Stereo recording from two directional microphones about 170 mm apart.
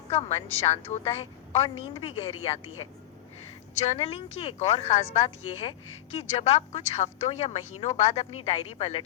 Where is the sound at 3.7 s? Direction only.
35° left (ahead or behind).